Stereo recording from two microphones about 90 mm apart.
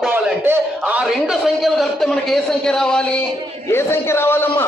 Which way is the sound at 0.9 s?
5° right (ahead or behind).